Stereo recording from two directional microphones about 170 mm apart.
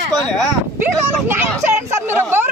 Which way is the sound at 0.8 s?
10° right (ahead or behind).